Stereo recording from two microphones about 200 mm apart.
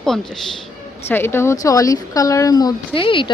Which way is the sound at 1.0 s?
10° left (ahead or behind).